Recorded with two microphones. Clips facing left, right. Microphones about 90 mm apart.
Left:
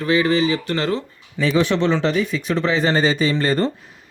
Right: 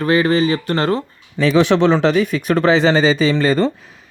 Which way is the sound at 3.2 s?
90° right.